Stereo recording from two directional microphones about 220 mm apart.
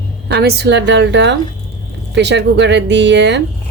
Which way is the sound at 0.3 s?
45° right (ahead or behind).